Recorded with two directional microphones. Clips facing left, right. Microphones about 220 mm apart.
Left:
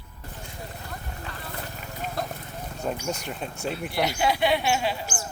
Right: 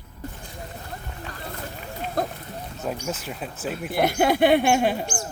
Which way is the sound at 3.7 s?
50° right (ahead or behind).